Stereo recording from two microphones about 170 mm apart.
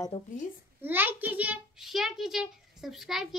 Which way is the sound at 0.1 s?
35° left (ahead or behind).